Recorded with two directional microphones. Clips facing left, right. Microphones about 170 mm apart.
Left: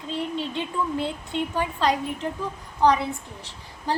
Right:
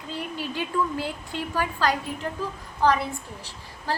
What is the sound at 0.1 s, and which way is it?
A woman's voice, 25° left (ahead or behind).